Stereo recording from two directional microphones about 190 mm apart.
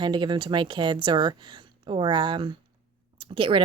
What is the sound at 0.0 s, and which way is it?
A woman's voice, 25° right (ahead or behind).